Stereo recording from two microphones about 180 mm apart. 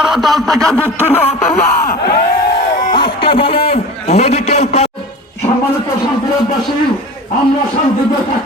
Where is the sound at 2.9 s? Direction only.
30° left (ahead or behind).